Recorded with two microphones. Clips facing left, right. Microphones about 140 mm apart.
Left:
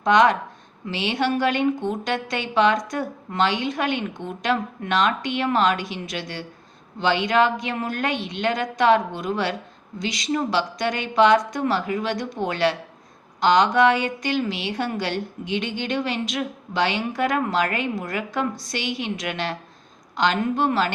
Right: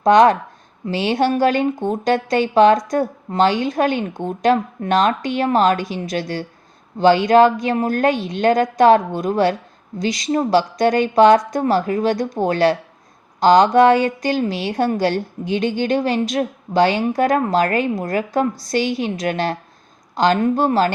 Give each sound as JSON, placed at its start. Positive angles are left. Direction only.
{"t": 0.0, "sound": "a woman's voice", "side_deg": -35}